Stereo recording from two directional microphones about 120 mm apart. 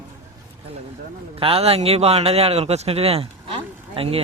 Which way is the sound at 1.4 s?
55° right (ahead or behind).